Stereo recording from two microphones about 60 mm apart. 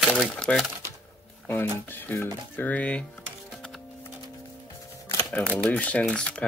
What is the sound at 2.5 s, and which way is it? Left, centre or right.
Speech, left.